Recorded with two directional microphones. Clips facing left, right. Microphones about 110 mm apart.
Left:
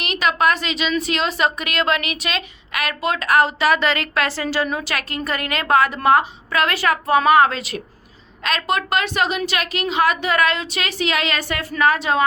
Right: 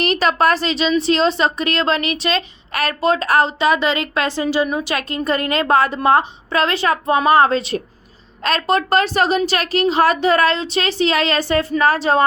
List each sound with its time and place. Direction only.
0.0 s a woman's voice: 35° right (ahead or behind)